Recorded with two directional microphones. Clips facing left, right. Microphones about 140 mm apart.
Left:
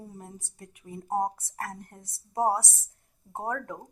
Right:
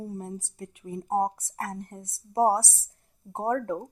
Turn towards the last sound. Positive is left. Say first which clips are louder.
# right 6 dB
turn(degrees=-35)  # may be behind; listen again after turning